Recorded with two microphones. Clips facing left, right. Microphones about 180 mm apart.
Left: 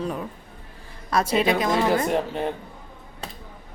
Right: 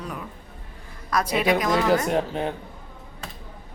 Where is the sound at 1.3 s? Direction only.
25° left (ahead or behind).